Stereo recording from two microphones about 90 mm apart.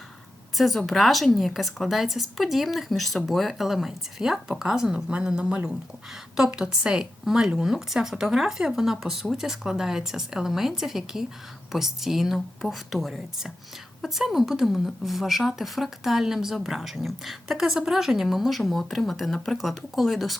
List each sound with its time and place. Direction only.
0.5 s a woman's voice: centre (ahead or behind)